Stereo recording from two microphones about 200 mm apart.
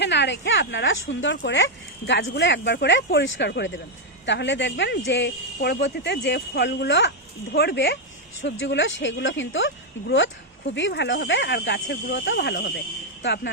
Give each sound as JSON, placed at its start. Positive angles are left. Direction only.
{"t": 0.0, "sound": "speech", "side_deg": 60}